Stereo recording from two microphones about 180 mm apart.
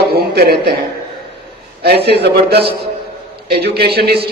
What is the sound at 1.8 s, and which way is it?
A man's voice, 60° right (ahead or behind).